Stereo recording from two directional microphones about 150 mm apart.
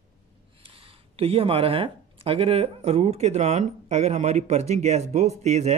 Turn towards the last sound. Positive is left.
turn(degrees=-45)  # may be behind; listen again after turning